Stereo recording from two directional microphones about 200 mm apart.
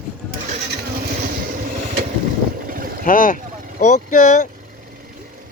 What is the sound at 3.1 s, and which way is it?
A man's voice, 40° left (ahead or behind).